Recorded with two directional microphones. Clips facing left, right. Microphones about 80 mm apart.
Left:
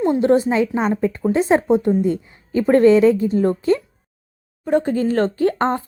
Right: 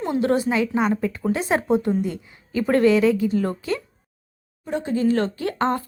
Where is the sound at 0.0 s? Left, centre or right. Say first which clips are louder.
Left 5 dB; left.